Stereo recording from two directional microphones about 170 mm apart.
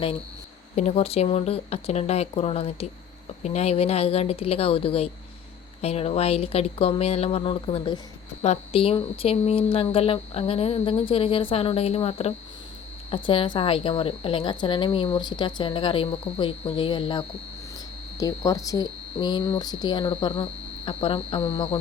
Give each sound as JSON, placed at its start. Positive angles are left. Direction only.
{"t": 0.8, "sound": "a woman's voice", "side_deg": 40}